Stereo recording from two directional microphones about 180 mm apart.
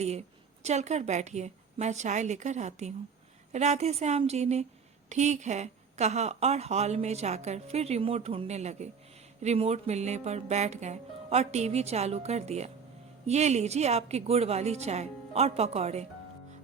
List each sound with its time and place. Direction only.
0.0 s a woman's voice: 35° right (ahead or behind)